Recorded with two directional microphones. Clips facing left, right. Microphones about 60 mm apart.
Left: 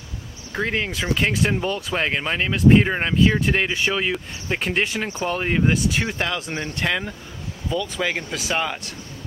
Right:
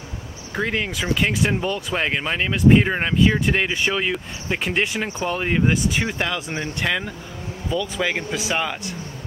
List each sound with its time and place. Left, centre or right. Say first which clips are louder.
0.6 s speech: even; centre
6.4 s speech: right 1 dB; centre
6.8 s speech: even; centre